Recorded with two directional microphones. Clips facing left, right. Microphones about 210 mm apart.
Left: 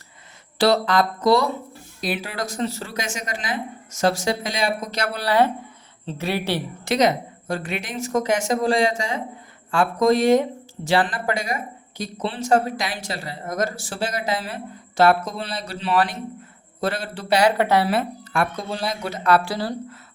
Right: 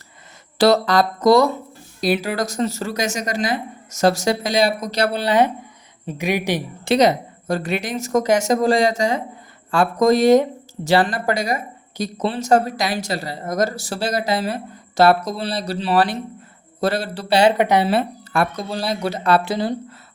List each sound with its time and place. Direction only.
0.6 s a woman's voice: 40° right (ahead or behind)
5.2 s speech: 20° right (ahead or behind)
6.8 s a woman's voice: 35° right (ahead or behind)
17.6 s speech: 20° right (ahead or behind)